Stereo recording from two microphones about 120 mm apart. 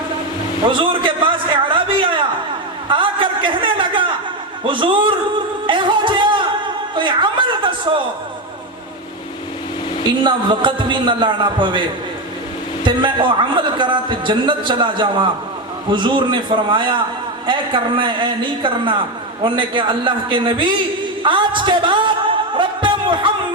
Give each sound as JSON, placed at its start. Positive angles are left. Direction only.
{"t": 0.7, "sound": "a sound", "side_deg": -45}
{"t": 4.6, "sound": "a man's voice", "side_deg": -45}
{"t": 5.6, "sound": "music", "side_deg": -40}
{"t": 6.9, "sound": "a man's voice", "side_deg": -40}
{"t": 10.2, "sound": "a man's voice", "side_deg": -40}
{"t": 12.8, "sound": "a man's voice", "side_deg": -45}
{"t": 22.5, "sound": "a sound", "side_deg": -45}